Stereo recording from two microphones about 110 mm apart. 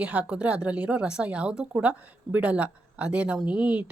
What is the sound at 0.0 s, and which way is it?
A woman's voice, 15° right (ahead or behind).